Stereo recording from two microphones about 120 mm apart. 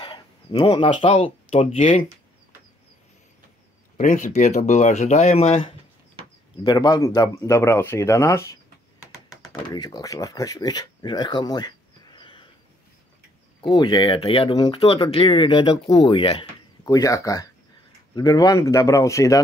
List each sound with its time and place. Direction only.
0.0 s a sound: 45° left (ahead or behind)
1.0 s speech: 50° left (ahead or behind)
3.9 s speech: 85° left; by 5.8 s 55° left (ahead or behind)
6.6 s speech: 35° left (ahead or behind)
13.6 s speech: 40° left (ahead or behind)
16.8 s speech: 30° left (ahead or behind)